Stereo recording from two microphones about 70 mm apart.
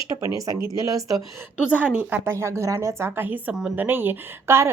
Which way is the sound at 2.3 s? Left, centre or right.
Right.